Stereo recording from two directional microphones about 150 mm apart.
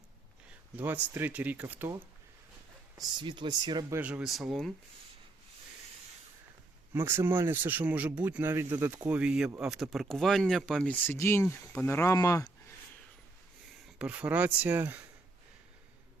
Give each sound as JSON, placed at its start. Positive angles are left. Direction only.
{"t": 0.8, "sound": "speech", "side_deg": -10}
{"t": 3.0, "sound": "speech", "side_deg": -30}
{"t": 3.9, "sound": "speech", "side_deg": -10}
{"t": 6.9, "sound": "speech", "side_deg": -15}
{"t": 14.0, "sound": "speech", "side_deg": -10}